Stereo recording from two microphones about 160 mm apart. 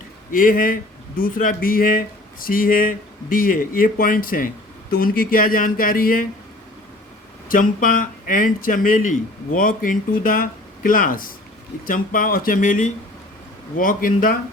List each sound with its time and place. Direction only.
0.3 s speech: 60° left (ahead or behind)
7.4 s speech: 60° left (ahead or behind)